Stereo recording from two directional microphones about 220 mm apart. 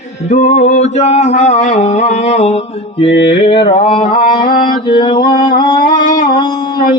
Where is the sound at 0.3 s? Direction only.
35° left (ahead or behind).